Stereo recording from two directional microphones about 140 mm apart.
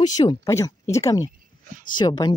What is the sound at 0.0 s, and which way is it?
Speech, 30° left (ahead or behind).